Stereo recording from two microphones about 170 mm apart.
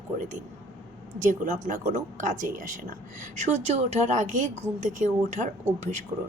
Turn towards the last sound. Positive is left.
turn(degrees=-40)  # may be behind; listen again after turning